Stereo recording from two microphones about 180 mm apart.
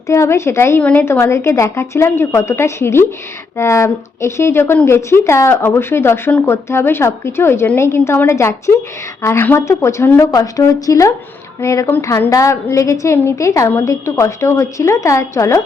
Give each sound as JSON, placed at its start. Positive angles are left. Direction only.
{"t": 0.1, "sound": "speech", "side_deg": 15}